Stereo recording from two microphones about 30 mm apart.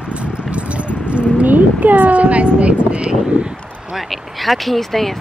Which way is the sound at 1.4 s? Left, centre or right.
Right.